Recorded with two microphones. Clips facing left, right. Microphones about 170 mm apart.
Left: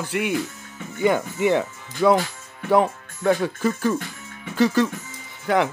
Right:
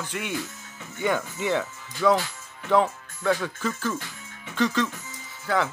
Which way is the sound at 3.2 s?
50° left (ahead or behind).